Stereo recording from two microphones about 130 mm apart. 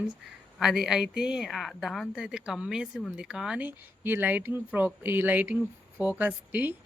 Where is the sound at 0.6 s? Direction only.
Centre (ahead or behind).